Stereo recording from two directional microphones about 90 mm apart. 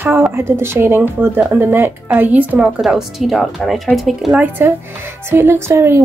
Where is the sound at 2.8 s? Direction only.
Centre (ahead or behind).